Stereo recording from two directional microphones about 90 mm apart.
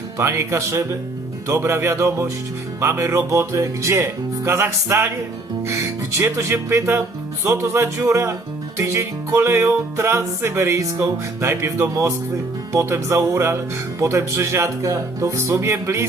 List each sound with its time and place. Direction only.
0.2 s speech: 30° right (ahead or behind)
1.5 s music: 30° right (ahead or behind)
6.3 s speech: 30° right (ahead or behind)
7.4 s music: 30° right (ahead or behind)